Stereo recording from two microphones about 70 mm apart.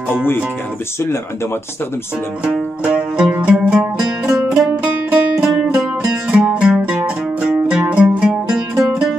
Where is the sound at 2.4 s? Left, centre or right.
Centre.